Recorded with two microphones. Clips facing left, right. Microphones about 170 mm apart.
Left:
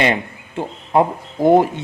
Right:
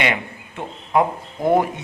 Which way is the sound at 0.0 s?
30° left (ahead or behind).